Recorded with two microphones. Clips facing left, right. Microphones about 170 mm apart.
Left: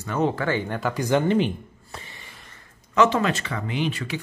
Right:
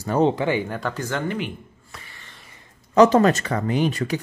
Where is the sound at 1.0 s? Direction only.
15° left (ahead or behind).